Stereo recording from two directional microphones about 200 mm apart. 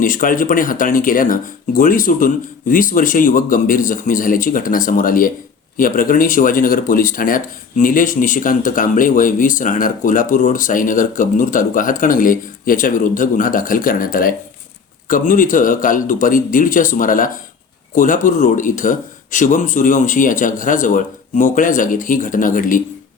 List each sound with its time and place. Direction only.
0.0 s speech: 45° left (ahead or behind)